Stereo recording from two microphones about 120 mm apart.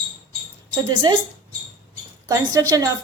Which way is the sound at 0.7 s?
40° right (ahead or behind).